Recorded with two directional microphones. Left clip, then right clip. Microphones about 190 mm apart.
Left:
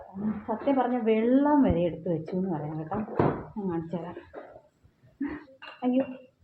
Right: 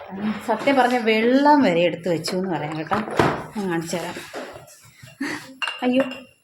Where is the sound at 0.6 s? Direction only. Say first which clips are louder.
Right 8 dB; 15° right (ahead or behind).